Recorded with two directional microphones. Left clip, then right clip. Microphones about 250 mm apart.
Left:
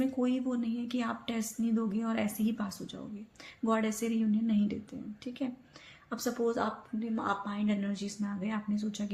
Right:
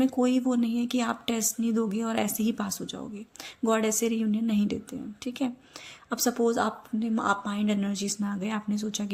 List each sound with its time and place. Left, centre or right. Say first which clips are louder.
0.0 s speech: right 7 dB; right